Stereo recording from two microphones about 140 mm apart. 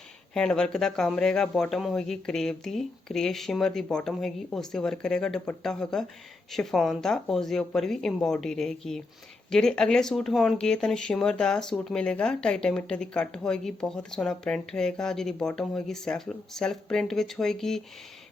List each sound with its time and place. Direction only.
0.3 s speech: 5° left (ahead or behind)